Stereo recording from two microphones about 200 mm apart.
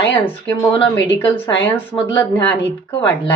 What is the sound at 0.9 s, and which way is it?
Speech, 10° left (ahead or behind).